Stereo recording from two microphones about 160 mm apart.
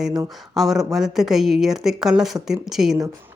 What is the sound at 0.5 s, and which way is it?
Speech, centre (ahead or behind).